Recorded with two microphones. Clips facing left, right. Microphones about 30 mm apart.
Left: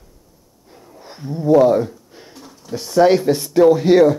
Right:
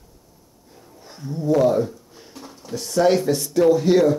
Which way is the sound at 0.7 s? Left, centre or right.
Left.